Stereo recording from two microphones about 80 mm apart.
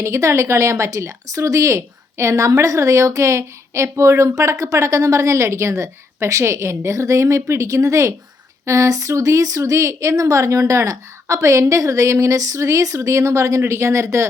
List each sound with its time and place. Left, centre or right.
0.0 s speech: right